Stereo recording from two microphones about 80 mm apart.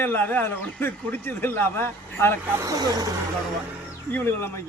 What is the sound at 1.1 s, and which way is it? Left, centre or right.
A man's voice, left.